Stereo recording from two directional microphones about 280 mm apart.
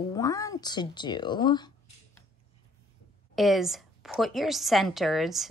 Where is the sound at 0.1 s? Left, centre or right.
Centre.